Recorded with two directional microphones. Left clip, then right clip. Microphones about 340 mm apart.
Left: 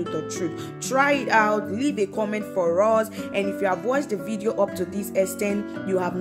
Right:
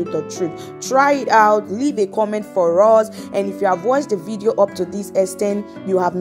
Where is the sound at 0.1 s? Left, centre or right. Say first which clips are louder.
Right 6 dB; centre.